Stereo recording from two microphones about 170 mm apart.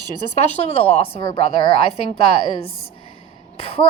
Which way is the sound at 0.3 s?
40° left (ahead or behind).